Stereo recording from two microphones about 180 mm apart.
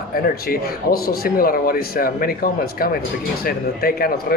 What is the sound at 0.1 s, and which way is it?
Speech, 55° left (ahead or behind).